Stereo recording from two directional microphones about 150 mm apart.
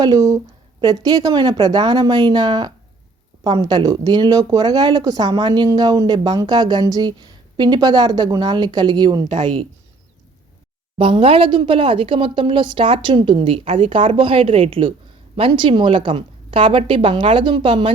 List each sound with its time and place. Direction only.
0.0 s speech: 25° right (ahead or behind)
10.9 s speech: 35° right (ahead or behind)